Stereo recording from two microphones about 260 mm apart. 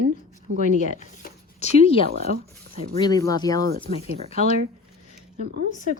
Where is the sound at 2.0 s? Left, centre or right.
Right.